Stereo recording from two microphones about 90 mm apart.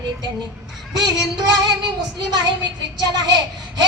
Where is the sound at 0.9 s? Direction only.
50° right (ahead or behind).